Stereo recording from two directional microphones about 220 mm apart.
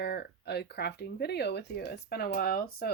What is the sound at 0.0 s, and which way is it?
Speech, 45° left (ahead or behind).